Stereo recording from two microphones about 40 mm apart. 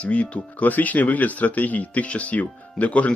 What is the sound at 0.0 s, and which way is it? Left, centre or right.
Speech, left.